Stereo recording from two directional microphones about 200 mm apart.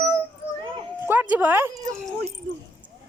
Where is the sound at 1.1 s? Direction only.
10° right (ahead or behind).